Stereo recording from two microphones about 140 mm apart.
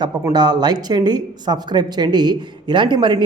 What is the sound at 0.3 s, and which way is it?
Speech, 30° right (ahead or behind).